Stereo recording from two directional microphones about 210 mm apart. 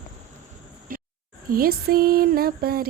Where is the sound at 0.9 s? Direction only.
40° right (ahead or behind).